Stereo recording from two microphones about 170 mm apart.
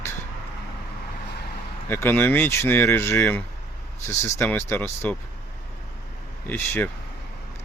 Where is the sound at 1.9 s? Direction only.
10° left (ahead or behind).